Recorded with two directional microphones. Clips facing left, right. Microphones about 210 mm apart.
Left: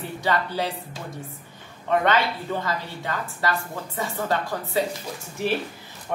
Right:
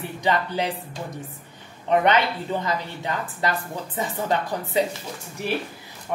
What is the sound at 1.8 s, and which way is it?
A woman's voice, 20° right (ahead or behind).